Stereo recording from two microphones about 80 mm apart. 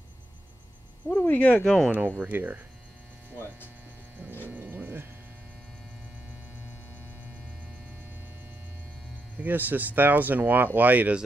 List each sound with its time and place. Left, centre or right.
1.0 s speech: left
1.9 s speech: right
4.5 s a sound: right
9.4 s speech: right